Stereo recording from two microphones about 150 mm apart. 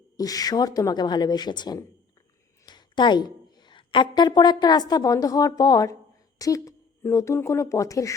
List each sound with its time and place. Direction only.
0.2 s a woman's voice: 25° left (ahead or behind)